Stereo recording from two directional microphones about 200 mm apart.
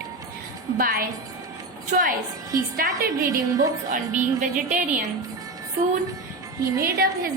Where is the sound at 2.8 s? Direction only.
45° right (ahead or behind).